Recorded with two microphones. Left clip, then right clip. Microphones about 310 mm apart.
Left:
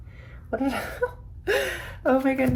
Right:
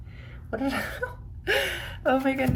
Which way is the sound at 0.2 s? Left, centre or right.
Centre.